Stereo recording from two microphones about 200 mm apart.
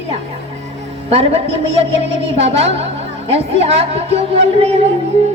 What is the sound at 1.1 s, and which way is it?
Speech, 30° right (ahead or behind).